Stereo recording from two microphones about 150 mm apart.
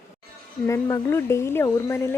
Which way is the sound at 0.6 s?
20° left (ahead or behind).